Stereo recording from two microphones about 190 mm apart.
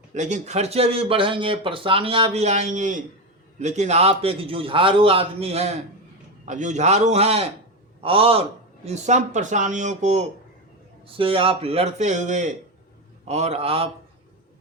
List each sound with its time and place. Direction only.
0.1 s speech: 40° right (ahead or behind)